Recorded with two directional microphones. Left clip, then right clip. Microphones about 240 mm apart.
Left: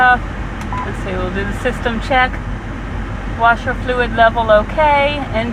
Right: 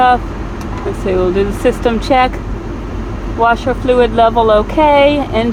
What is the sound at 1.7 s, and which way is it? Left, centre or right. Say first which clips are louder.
Speech: right 4 dB; right.